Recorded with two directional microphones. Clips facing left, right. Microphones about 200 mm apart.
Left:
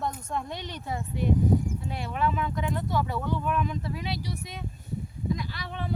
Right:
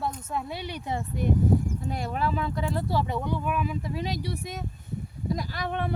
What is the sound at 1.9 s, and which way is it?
Speech, 40° right (ahead or behind).